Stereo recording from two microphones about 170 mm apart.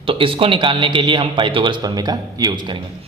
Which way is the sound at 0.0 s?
30° right (ahead or behind).